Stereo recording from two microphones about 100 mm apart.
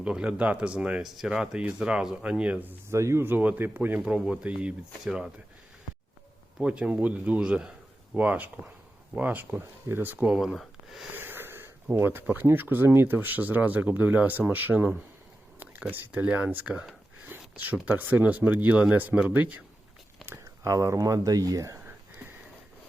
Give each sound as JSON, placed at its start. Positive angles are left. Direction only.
{"t": 0.0, "sound": "speech", "side_deg": -10}
{"t": 2.9, "sound": "speech", "side_deg": -30}
{"t": 6.6, "sound": "speech", "side_deg": -10}
{"t": 10.2, "sound": "speech", "side_deg": -5}
{"t": 11.1, "sound": "wheeze", "side_deg": -20}
{"t": 11.9, "sound": "speech", "side_deg": -20}
{"t": 15.5, "sound": "a sound", "side_deg": -20}
{"t": 17.8, "sound": "speech", "side_deg": -15}
{"t": 20.2, "sound": "speech", "side_deg": -30}